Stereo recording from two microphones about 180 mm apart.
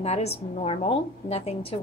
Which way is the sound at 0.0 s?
35° left (ahead or behind).